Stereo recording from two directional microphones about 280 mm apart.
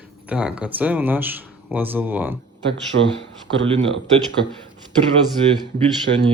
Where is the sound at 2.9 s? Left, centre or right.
Right.